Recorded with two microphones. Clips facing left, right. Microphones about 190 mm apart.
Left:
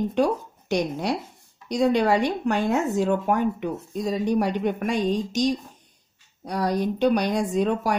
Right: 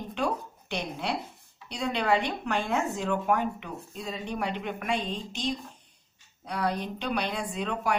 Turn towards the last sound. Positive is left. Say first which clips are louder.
# left 8 dB
turn(degrees=40)  # may be behind; listen again after turning